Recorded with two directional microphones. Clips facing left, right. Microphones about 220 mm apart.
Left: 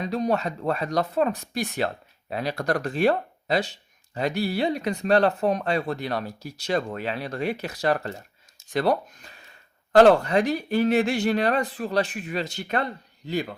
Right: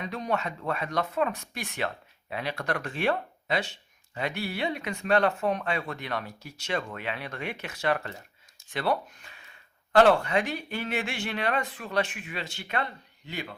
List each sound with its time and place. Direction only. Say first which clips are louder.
0.0 s speech: left 6 dB; 35° left (ahead or behind)